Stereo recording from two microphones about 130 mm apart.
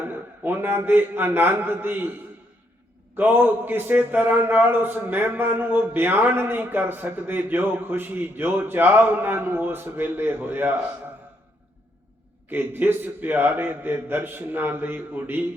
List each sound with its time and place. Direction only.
0.0 s a man's voice: 15° right (ahead or behind)
3.2 s a man's voice: 15° right (ahead or behind)
12.5 s a man's voice: 15° right (ahead or behind)